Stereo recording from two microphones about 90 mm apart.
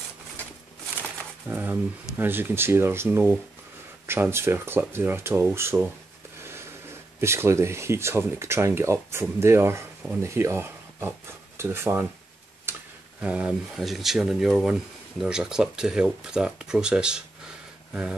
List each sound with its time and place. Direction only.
1.5 s speech: 25° right (ahead or behind)
7.2 s speech: 30° right (ahead or behind)
12.7 s tick-tock: 25° right (ahead or behind)
13.2 s speech: 15° right (ahead or behind)
13.7 s speech: centre (ahead or behind)